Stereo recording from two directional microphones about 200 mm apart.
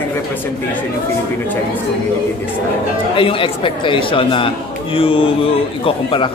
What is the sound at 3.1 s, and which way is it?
Speech, 25° left (ahead or behind).